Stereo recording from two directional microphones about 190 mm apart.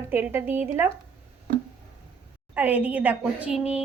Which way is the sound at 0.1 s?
10° right (ahead or behind).